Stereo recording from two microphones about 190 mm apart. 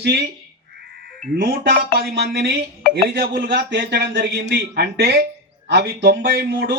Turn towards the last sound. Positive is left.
turn(degrees=-60)  # may be behind; listen again after turning